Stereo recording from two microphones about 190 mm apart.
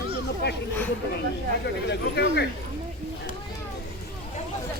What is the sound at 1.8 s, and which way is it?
Speech, 65° left (ahead or behind).